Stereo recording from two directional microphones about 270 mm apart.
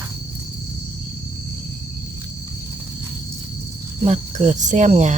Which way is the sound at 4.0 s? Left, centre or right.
Right.